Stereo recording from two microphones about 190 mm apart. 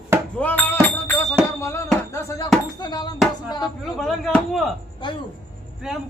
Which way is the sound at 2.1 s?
15° left (ahead or behind).